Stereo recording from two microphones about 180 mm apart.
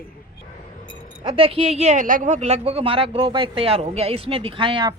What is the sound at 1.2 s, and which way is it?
Speech, 25° right (ahead or behind).